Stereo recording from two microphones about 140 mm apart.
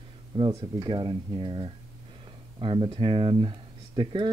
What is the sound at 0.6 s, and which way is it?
Speech, 35° right (ahead or behind).